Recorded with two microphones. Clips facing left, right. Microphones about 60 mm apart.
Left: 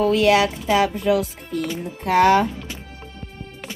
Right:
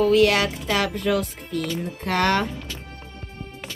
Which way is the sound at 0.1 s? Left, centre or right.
Left.